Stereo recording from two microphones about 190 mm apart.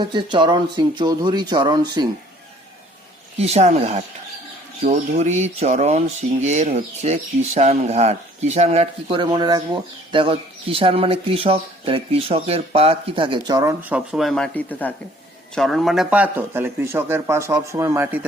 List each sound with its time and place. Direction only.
0.0 s speech: 25° right (ahead or behind)
3.3 s speech: 35° right (ahead or behind)
13.8 s a man's voice: 5° right (ahead or behind)